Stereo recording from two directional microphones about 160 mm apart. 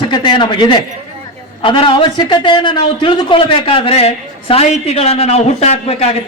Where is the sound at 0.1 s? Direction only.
30° left (ahead or behind).